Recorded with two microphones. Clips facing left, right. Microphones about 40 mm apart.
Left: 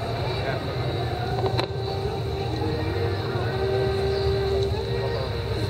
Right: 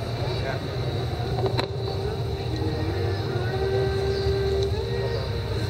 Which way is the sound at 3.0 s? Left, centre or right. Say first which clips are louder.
Left 1 dB; centre.